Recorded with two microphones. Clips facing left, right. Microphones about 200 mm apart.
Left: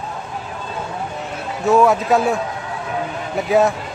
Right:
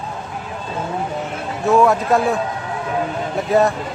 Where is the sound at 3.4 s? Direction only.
Centre (ahead or behind).